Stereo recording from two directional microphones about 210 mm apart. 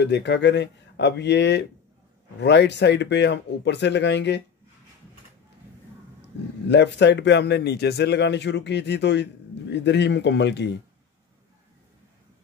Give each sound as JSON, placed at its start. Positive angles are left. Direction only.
{"t": 0.0, "sound": "a man's voice", "side_deg": 55}
{"t": 6.7, "sound": "a man's voice", "side_deg": 55}